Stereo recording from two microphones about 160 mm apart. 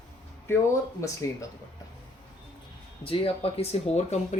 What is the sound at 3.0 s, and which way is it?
Speech, 35° left (ahead or behind).